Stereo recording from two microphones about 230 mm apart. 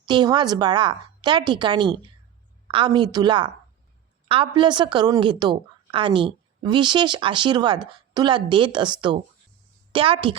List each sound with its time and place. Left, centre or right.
0.0 s a woman's voice: centre